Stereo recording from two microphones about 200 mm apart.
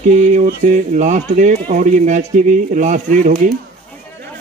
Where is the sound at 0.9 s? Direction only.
40° right (ahead or behind).